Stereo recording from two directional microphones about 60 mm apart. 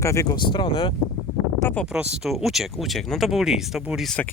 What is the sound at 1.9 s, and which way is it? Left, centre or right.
Speech, centre.